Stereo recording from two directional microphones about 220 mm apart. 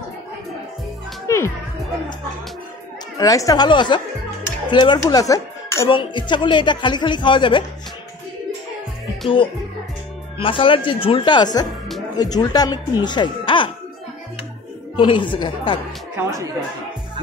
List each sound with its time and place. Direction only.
1.2 s music: 15° left (ahead or behind)
3.2 s speech: 15° left (ahead or behind)
10.3 s speech: 25° left (ahead or behind)
15.0 s speech: 20° left (ahead or behind)
16.2 s speech: 15° right (ahead or behind)